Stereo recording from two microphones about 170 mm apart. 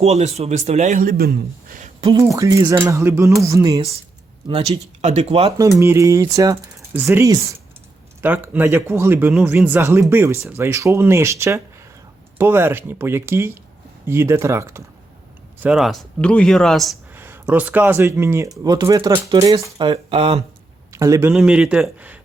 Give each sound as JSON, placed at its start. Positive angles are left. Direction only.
{"t": 0.0, "sound": "a man's voice", "side_deg": -40}
{"t": 2.0, "sound": "speech", "side_deg": -30}
{"t": 2.2, "sound": "speech", "side_deg": -20}
{"t": 4.4, "sound": "speech", "side_deg": -35}
{"t": 5.5, "sound": "speech", "side_deg": -20}
{"t": 15.6, "sound": "speech", "side_deg": 0}
{"t": 17.2, "sound": "speech", "side_deg": -10}
{"t": 20.9, "sound": "a man's voice", "side_deg": -20}
{"t": 21.3, "sound": "speech", "side_deg": -5}